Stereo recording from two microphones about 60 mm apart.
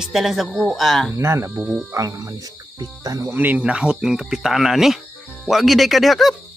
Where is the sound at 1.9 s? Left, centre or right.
Right.